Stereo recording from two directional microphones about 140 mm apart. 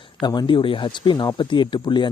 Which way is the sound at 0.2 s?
30° left (ahead or behind).